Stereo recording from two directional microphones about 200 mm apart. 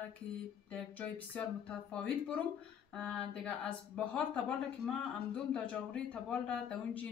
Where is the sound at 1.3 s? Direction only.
5° left (ahead or behind).